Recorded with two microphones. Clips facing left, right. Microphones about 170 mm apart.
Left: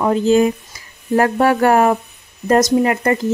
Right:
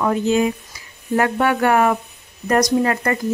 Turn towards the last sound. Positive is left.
turn(degrees=25)  # may be behind; listen again after turning